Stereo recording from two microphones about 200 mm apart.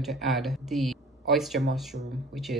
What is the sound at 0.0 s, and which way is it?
Speech, centre (ahead or behind).